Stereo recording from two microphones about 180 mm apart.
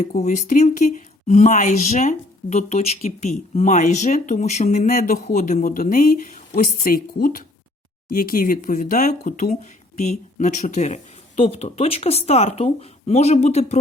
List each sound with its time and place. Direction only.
0.0 s a woman's voice: 40° left (ahead or behind)